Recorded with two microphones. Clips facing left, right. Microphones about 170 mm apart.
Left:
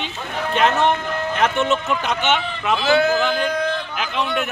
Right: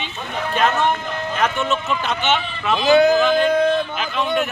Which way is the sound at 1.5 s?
20° left (ahead or behind).